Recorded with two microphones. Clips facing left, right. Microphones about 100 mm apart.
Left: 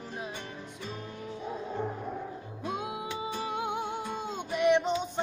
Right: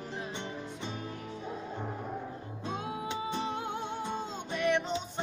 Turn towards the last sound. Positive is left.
turn(degrees=20)  # may be behind; listen again after turning